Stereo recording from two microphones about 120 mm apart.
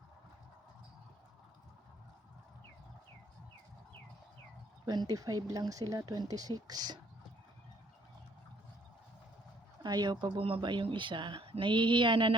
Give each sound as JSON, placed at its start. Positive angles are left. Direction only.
{"t": 4.9, "sound": "speech", "side_deg": -35}
{"t": 9.8, "sound": "speech", "side_deg": -35}